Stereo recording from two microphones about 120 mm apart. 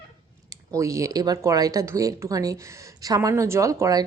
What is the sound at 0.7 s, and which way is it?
Speech, 25° right (ahead or behind).